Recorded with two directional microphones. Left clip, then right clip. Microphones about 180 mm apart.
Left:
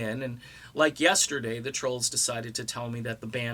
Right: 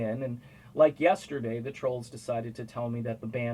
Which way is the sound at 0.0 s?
25° left (ahead or behind).